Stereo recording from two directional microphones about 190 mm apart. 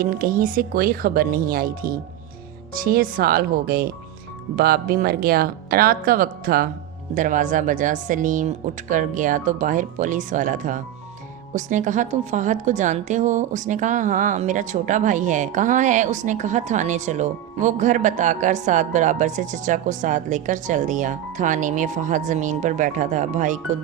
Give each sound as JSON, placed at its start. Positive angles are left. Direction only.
{"t": 0.0, "sound": "a woman's voice", "side_deg": -50}